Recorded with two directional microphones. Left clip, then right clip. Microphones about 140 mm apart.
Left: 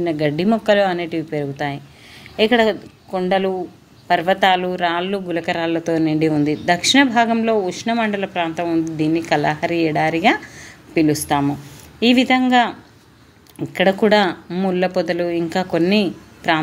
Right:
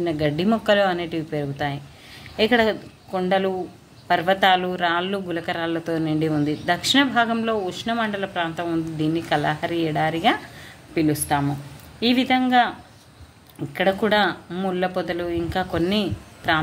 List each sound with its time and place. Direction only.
0.0 s a woman's voice: 35° left (ahead or behind)